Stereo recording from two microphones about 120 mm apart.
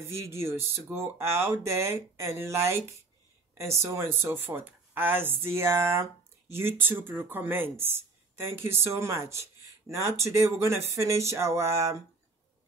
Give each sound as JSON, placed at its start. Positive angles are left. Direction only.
{"t": 0.0, "sound": "speech", "side_deg": -20}